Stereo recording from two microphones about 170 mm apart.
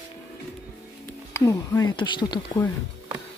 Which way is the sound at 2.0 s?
25° left (ahead or behind).